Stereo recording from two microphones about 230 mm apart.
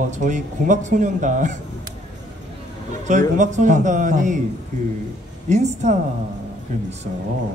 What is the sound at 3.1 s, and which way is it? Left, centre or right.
Speech, right.